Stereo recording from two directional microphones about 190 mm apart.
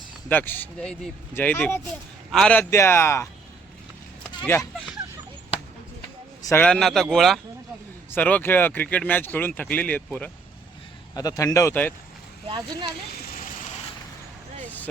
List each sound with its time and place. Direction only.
0.3 s speech: 10° left (ahead or behind)
4.4 s speech: 15° left (ahead or behind)
6.4 s a man's voice: 15° left (ahead or behind)
6.7 s speech: centre (ahead or behind)
11.1 s speech: 20° left (ahead or behind)
12.5 s speech: 25° right (ahead or behind)
14.6 s vehicle: 10° left (ahead or behind)